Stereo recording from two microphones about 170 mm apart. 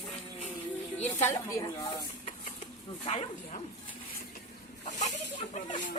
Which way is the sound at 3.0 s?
40° left (ahead or behind).